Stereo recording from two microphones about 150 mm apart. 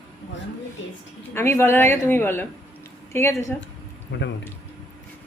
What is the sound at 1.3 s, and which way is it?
Speech, 15° left (ahead or behind).